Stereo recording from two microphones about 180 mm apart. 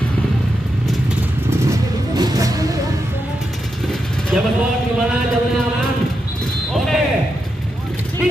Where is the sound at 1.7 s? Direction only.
20° right (ahead or behind).